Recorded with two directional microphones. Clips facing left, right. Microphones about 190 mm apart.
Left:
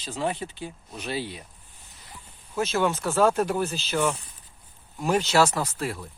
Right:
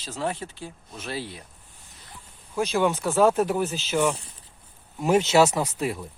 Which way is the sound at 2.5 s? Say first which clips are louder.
Right 1 dB; 15° right (ahead or behind).